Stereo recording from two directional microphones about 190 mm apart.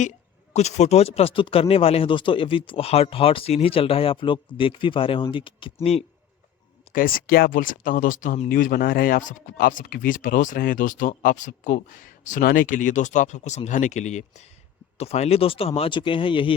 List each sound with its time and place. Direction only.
0.5 s speech: 35° left (ahead or behind)
6.9 s speech: 50° left (ahead or behind); by 16.6 s 25° left (ahead or behind)